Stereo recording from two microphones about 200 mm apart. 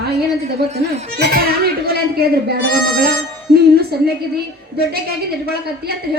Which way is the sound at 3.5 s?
50° right (ahead or behind).